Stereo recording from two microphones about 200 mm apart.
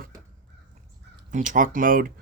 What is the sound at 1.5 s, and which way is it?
Speech, 40° right (ahead or behind).